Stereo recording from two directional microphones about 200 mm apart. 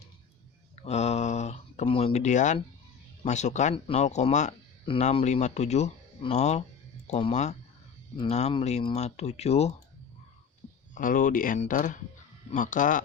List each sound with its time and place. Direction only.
0.9 s speech: 30° left (ahead or behind)
10.9 s speech: 45° left (ahead or behind)